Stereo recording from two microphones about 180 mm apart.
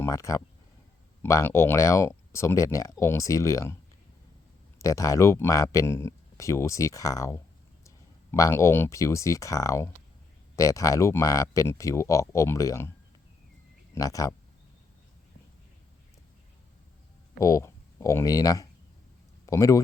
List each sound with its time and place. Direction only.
0.0 s speech: 15° left (ahead or behind)
4.8 s speech: 20° left (ahead or behind)
13.9 s speech: 20° left (ahead or behind)
17.3 s speech: 15° left (ahead or behind)